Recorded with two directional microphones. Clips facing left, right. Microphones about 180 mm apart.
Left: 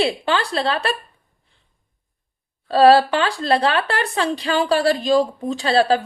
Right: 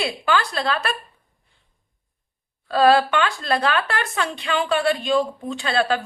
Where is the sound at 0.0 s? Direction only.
30° left (ahead or behind).